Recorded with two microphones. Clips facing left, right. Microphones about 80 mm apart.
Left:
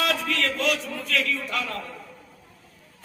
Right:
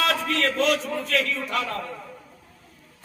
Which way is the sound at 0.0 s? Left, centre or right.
Right.